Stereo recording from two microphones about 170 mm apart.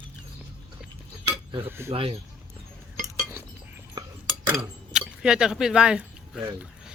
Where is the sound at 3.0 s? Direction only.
15° right (ahead or behind).